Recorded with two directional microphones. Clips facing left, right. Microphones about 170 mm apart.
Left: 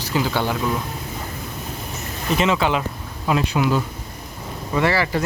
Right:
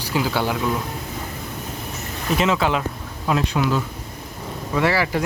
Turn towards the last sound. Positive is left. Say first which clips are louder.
# even
turn(degrees=-10)  # may be behind; listen again after turning